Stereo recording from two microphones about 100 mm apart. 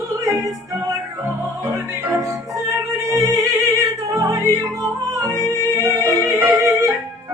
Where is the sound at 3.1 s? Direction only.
35° right (ahead or behind).